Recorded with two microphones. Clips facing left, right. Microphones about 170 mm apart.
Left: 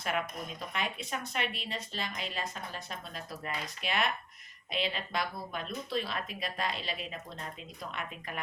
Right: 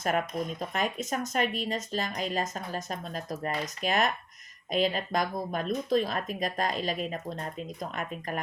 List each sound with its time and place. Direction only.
0.0 s speech: 45° right (ahead or behind)